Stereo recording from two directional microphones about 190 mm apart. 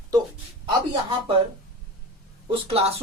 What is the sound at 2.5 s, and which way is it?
Speech, 30° right (ahead or behind).